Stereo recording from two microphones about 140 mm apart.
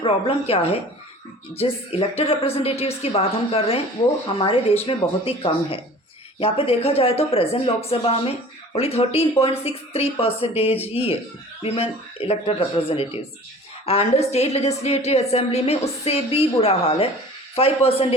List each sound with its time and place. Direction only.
0.0 s a woman's voice: 45° left (ahead or behind)